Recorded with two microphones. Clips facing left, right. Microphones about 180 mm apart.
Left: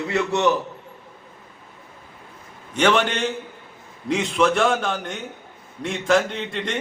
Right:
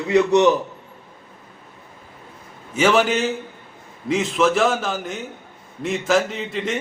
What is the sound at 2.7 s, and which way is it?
A man's voice, 5° right (ahead or behind).